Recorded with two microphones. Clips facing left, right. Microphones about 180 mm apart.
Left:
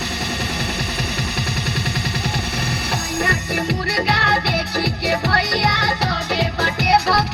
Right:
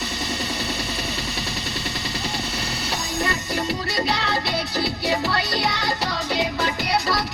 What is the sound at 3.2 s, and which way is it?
Music, 60° left (ahead or behind).